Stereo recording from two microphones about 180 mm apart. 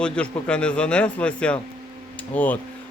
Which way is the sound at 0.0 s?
5° left (ahead or behind).